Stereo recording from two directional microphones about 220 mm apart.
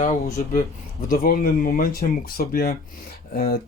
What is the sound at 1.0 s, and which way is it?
Speech, 40° left (ahead or behind).